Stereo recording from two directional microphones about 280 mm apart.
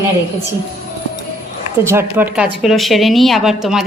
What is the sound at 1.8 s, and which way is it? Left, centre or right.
A woman's voice, centre.